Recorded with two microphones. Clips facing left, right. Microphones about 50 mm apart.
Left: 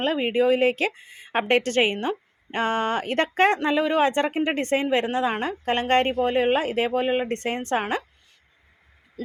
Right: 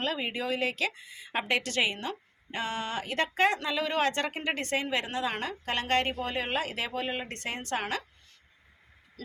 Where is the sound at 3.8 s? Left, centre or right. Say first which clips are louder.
Left 7 dB; centre.